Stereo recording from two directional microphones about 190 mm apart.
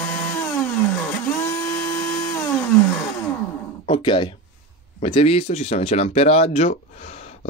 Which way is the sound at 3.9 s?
25° left (ahead or behind).